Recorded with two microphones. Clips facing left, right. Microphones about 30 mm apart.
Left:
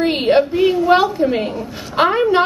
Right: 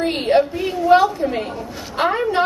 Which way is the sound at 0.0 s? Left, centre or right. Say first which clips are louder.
Left 2 dB; centre.